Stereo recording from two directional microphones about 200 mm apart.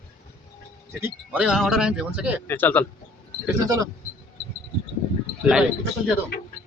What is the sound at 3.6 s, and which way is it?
Speech, 20° right (ahead or behind).